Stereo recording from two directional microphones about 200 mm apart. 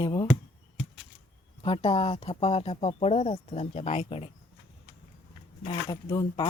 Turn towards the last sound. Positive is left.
turn(degrees=20)  # may be behind; listen again after turning